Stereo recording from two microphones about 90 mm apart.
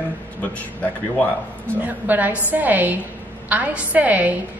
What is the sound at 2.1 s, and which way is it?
A woman's voice, 20° right (ahead or behind).